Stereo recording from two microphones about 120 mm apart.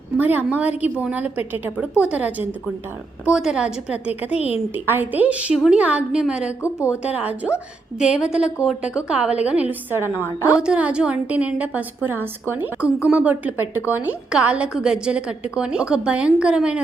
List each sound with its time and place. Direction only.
0.2 s a woman's voice: 15° right (ahead or behind)
6.6 s speech: 25° left (ahead or behind)
7.0 s a woman's voice: 10° right (ahead or behind)